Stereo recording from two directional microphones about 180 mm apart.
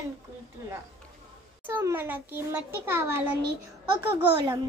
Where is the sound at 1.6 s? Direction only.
10° right (ahead or behind).